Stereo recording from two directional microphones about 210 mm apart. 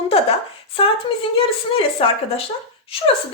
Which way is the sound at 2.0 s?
25° left (ahead or behind).